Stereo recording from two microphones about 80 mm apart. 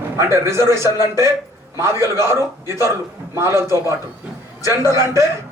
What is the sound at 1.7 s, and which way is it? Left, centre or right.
A man's voice, right.